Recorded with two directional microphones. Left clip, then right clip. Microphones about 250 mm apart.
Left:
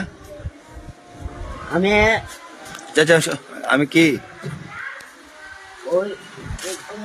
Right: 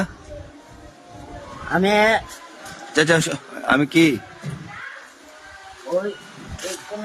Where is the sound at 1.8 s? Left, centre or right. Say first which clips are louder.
Left 1 dB; centre.